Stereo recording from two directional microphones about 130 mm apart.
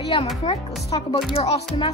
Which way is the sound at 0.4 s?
45° left (ahead or behind).